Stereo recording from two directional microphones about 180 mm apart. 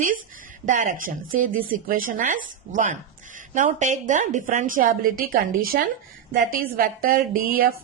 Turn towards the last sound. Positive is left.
turn(degrees=-55)  # may be behind; listen again after turning